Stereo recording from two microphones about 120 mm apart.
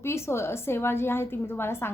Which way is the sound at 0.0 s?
20° left (ahead or behind).